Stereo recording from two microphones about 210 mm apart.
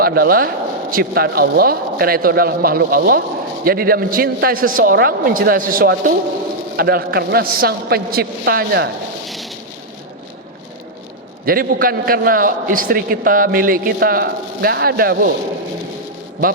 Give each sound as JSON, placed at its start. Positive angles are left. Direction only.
{"t": 0.0, "sound": "a man's voice", "side_deg": -45}
{"t": 9.2, "sound": "a sound", "side_deg": 0}
{"t": 11.4, "sound": "a man's voice", "side_deg": -45}